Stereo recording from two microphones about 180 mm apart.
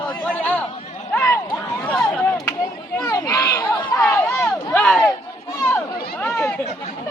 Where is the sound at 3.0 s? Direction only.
20° left (ahead or behind).